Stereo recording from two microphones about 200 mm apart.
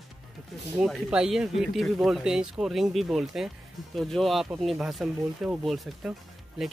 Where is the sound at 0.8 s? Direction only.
5° right (ahead or behind).